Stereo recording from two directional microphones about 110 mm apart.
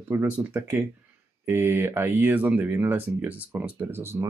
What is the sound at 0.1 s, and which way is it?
Speech, 20° right (ahead or behind).